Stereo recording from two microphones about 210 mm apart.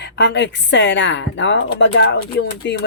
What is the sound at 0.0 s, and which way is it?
A woman's voice, 55° left (ahead or behind).